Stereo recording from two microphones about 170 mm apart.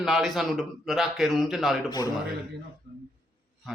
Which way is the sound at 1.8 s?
25° left (ahead or behind).